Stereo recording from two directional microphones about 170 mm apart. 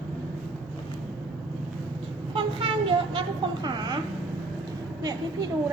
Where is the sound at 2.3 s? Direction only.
30° right (ahead or behind).